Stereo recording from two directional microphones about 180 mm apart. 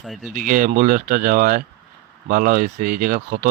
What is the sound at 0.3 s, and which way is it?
Speech, 50° right (ahead or behind).